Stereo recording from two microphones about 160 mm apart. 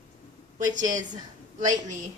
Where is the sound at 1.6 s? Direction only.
50° right (ahead or behind).